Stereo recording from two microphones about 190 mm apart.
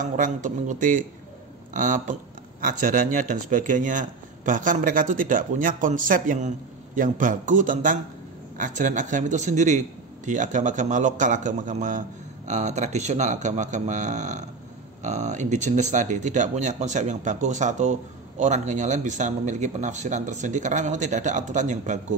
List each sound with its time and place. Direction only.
0.0 s a man's voice: 40° right (ahead or behind)